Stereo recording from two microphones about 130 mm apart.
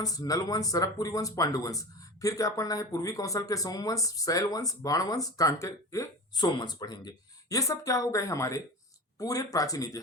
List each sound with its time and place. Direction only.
0.0 s speech: 30° left (ahead or behind)